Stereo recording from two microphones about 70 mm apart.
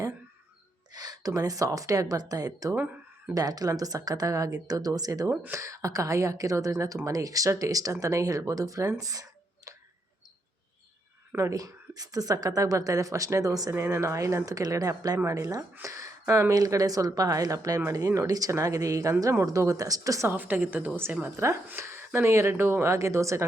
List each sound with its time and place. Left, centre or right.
0.9 s speech: right
2.7 s a sound: right
3.3 s speech: right
11.3 s speech: right
13.7 s speech: right
15.8 s speech: right
20.2 s a woman's voice: right